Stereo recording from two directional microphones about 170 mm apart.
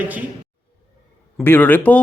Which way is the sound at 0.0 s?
10° right (ahead or behind).